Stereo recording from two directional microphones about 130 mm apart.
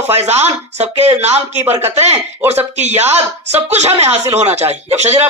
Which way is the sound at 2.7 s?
60° right (ahead or behind).